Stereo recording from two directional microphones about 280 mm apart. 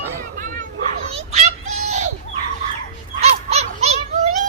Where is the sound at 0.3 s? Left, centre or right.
Right.